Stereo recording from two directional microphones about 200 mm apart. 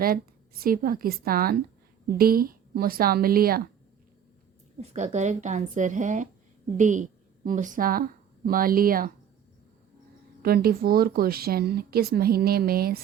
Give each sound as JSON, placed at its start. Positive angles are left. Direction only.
{"t": 0.6, "sound": "speech", "side_deg": -45}
{"t": 4.8, "sound": "a woman's voice", "side_deg": -35}
{"t": 10.4, "sound": "speech", "side_deg": -50}